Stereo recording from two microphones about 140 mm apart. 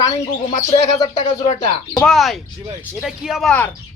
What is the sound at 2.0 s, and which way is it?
Speech, 5° left (ahead or behind).